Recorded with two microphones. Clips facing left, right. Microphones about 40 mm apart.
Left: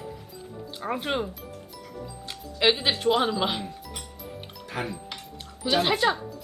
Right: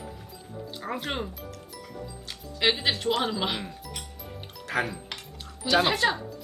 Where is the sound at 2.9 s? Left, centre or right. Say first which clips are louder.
Left 3 dB; centre.